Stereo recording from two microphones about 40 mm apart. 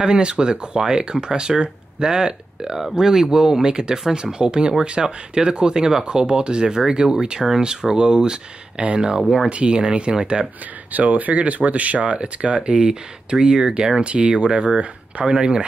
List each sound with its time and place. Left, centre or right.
0.0 s speech: right
9.5 s speech: right
10.9 s speech: right; by 14.0 s centre
14.0 s speech: right